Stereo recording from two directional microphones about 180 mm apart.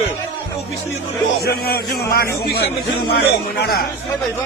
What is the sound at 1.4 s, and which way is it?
A man's voice, 60° left (ahead or behind).